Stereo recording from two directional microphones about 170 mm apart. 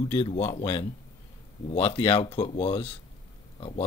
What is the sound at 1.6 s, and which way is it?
Speech, 30° left (ahead or behind).